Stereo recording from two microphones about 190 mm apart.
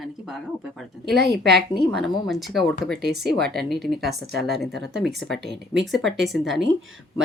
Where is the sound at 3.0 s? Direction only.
60° right (ahead or behind).